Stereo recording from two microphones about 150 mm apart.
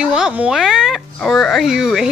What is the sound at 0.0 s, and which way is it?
Speech, 5° right (ahead or behind).